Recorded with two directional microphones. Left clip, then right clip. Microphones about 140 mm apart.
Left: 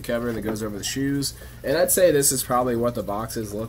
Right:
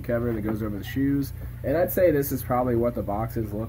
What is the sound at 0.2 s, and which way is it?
Speech, 25° left (ahead or behind).